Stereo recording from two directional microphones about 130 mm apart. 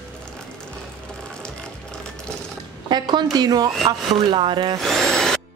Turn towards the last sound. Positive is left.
turn(degrees=5)  # may be behind; listen again after turning